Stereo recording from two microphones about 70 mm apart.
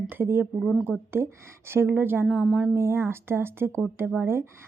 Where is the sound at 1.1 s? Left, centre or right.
Right.